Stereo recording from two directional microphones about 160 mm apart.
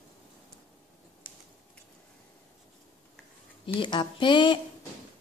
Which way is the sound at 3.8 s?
30° left (ahead or behind).